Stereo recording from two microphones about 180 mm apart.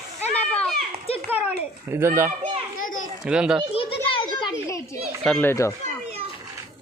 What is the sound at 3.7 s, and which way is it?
Children playing, 30° left (ahead or behind).